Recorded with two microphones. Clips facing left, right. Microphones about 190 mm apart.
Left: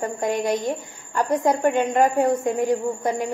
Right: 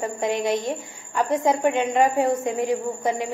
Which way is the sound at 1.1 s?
Centre (ahead or behind).